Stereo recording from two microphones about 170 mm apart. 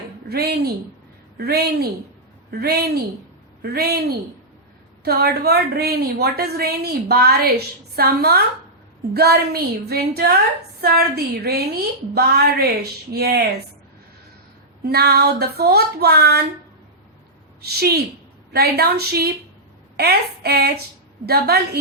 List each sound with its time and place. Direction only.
0.3 s a woman's voice: 70° right (ahead or behind)
5.0 s a woman's voice: 65° right (ahead or behind)
14.8 s a woman's voice: 70° right (ahead or behind)
17.6 s a woman's voice: 70° right (ahead or behind)